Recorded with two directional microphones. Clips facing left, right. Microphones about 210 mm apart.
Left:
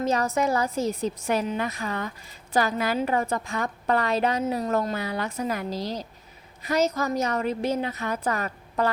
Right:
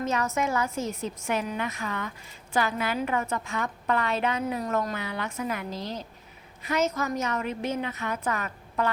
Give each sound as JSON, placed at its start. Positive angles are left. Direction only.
{"t": 0.0, "sound": "a woman's voice", "side_deg": 35}